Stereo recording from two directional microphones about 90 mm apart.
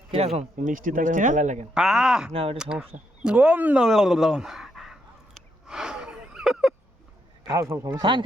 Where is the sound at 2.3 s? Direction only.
90° right.